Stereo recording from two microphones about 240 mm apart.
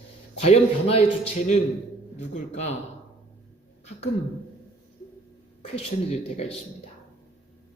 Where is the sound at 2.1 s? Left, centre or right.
Left.